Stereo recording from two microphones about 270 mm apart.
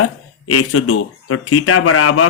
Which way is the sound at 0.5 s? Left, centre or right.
Left.